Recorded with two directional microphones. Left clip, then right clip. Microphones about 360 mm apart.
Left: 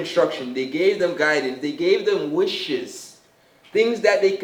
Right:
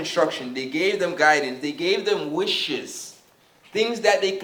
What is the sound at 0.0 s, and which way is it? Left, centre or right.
A man's voice, centre.